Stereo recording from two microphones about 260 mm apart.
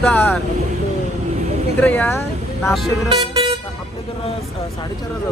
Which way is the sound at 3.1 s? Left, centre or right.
Centre.